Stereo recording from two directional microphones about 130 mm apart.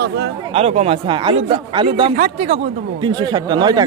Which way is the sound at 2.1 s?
90° right.